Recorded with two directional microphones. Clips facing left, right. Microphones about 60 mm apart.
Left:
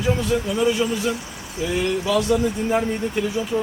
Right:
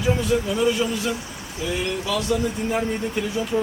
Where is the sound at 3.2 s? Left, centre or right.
Centre.